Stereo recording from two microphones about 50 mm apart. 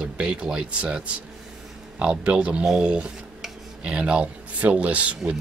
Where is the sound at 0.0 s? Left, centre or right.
Centre.